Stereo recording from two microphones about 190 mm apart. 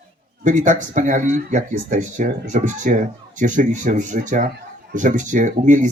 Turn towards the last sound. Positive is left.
turn(degrees=-40)  # may be behind; listen again after turning